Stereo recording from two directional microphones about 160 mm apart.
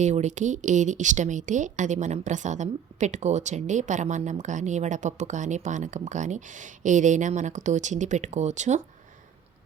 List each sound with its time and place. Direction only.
0.0 s speech: 45° right (ahead or behind)